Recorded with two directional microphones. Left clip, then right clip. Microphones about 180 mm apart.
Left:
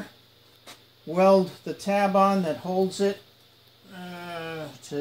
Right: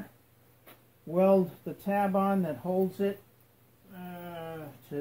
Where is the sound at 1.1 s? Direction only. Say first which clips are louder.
Left 5 dB; 25° right (ahead or behind).